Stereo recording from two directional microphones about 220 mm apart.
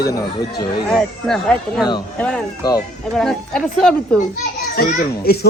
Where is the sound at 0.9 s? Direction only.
Centre (ahead or behind).